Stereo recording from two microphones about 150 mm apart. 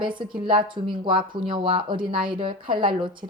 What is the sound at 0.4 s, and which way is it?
A woman's voice, 35° right (ahead or behind).